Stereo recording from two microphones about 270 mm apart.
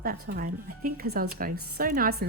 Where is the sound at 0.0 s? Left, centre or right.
Right.